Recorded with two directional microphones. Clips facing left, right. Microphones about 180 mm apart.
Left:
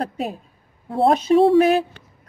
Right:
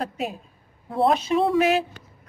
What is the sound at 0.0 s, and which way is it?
A woman's voice, 35° left (ahead or behind).